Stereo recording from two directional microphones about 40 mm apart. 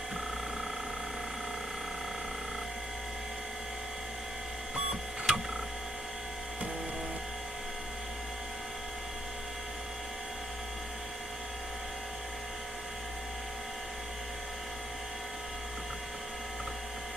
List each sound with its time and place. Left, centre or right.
4.7 s printer: centre